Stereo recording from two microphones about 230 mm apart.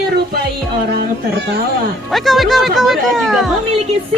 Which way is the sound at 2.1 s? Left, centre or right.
Centre.